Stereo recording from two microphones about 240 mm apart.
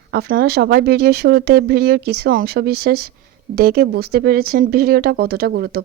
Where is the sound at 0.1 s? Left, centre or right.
Right.